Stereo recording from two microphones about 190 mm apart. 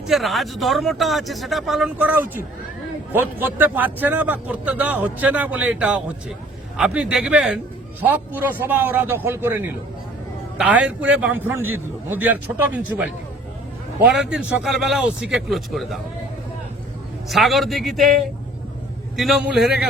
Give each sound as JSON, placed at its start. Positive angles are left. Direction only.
{"t": 0.1, "sound": "a man's voice", "side_deg": 0}
{"t": 14.0, "sound": "speech", "side_deg": -5}
{"t": 17.2, "sound": "a man's voice", "side_deg": 0}